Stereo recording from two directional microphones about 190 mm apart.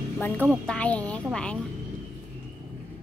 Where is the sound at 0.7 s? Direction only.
5° left (ahead or behind).